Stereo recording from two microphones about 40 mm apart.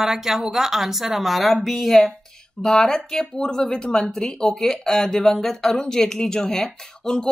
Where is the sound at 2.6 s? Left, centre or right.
Centre.